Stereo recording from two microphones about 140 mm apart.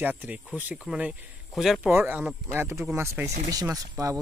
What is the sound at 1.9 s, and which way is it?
Speech, 15° right (ahead or behind).